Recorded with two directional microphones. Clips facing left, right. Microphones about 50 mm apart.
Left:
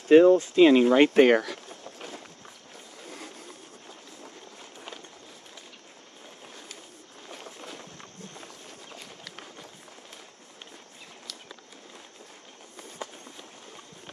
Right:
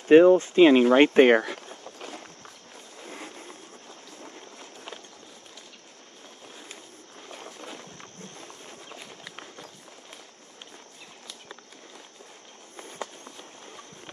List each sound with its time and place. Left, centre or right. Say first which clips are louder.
0.1 s speech: right 1 dB; right
7.2 s a sound: right 1 dB; centre
8.9 s walk: right 1 dB; centre